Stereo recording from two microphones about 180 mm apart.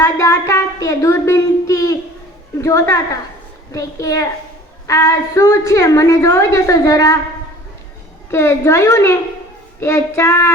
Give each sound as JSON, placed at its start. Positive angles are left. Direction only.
{"t": 0.0, "sound": "a woman's voice", "side_deg": 15}
{"t": 8.3, "sound": "a woman's voice", "side_deg": 15}